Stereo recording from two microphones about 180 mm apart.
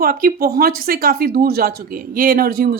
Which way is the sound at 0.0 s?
55° right (ahead or behind).